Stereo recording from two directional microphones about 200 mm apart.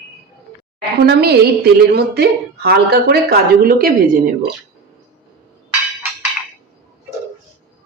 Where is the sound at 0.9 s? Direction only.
50° right (ahead or behind).